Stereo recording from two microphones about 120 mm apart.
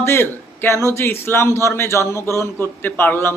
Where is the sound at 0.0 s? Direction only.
20° left (ahead or behind).